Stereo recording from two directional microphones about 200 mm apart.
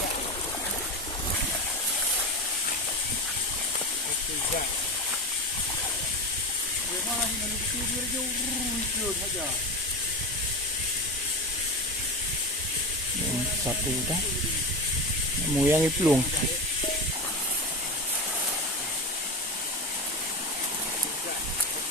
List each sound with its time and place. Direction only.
15.5 s speech: 10° right (ahead or behind)